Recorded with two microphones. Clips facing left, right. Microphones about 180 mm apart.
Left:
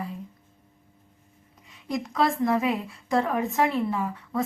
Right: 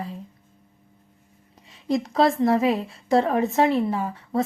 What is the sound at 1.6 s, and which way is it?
A woman's voice, 30° right (ahead or behind).